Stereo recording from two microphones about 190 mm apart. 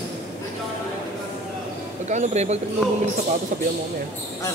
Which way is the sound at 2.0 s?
35° right (ahead or behind).